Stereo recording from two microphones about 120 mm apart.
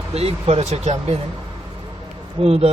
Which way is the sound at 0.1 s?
60° right (ahead or behind).